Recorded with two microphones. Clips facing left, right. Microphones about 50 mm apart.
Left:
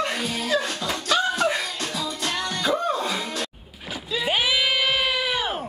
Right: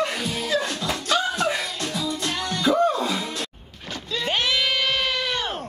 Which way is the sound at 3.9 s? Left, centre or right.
Centre.